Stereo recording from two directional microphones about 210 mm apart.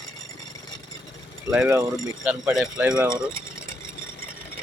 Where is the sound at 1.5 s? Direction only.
10° right (ahead or behind).